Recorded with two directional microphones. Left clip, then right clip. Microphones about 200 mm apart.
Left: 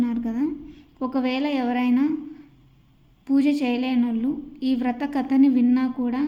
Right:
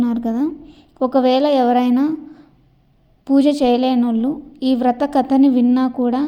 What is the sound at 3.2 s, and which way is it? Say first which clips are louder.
A woman's voice: right 7 dB; 25° right (ahead or behind).